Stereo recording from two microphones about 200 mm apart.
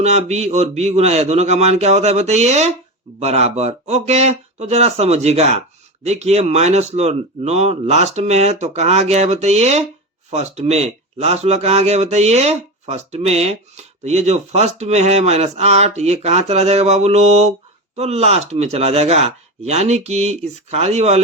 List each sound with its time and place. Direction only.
0.0 s speech: 35° right (ahead or behind)